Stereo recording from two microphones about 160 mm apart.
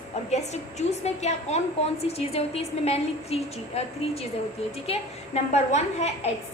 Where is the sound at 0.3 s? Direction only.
45° left (ahead or behind).